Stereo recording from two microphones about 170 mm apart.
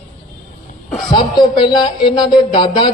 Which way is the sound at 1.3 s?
25° left (ahead or behind).